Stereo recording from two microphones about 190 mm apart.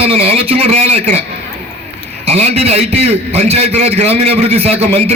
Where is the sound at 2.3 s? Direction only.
35° right (ahead or behind).